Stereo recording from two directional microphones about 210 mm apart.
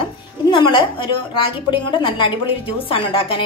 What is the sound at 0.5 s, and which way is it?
A woman's voice, 25° left (ahead or behind).